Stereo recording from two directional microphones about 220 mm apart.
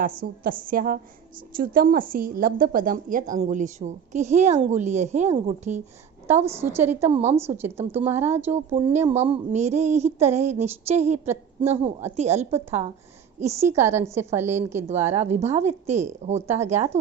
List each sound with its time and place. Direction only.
0.0 s a woman's voice: 40° right (ahead or behind)
6.4 s a woman's voice: 10° right (ahead or behind)
8.5 s a woman's voice: 30° right (ahead or behind)
13.5 s a woman's voice: 10° right (ahead or behind)
15.2 s a woman's voice: 30° right (ahead or behind)